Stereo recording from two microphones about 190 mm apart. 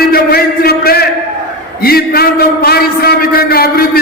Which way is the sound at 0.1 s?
55° left (ahead or behind).